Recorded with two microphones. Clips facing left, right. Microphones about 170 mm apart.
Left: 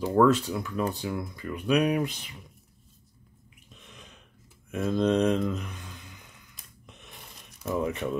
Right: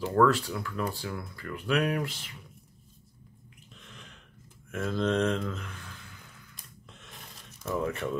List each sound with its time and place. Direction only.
0.0 s speech: 20° left (ahead or behind)
3.7 s throat clearing: 20° left (ahead or behind)
4.6 s speech: 20° left (ahead or behind)
6.9 s a sound: 15° left (ahead or behind)